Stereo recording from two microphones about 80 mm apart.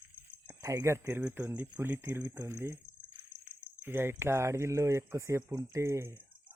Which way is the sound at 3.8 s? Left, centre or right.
Right.